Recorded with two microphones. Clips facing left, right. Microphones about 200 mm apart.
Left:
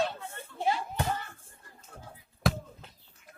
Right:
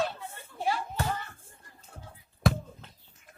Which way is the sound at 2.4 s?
Centre (ahead or behind).